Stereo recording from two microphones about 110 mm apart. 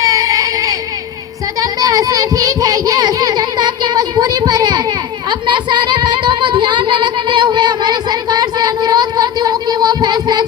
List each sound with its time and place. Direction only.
0.0 s baby cry: 35° right (ahead or behind)
1.5 s child singing: 35° right (ahead or behind)